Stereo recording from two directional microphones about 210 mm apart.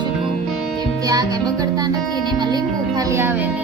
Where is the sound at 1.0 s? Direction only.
15° right (ahead or behind).